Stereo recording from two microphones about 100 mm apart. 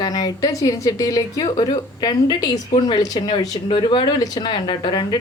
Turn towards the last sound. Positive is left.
turn(degrees=50)  # may be behind; listen again after turning